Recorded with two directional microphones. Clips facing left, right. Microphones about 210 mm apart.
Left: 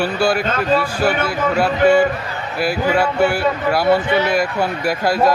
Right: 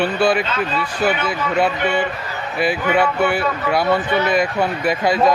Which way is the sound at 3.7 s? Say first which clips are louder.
Left 2 dB; 5° left (ahead or behind).